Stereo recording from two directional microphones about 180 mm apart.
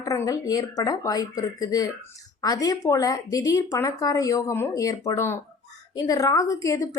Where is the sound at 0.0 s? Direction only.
20° left (ahead or behind).